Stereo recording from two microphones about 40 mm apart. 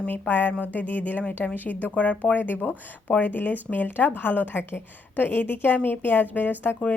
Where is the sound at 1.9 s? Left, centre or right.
Left.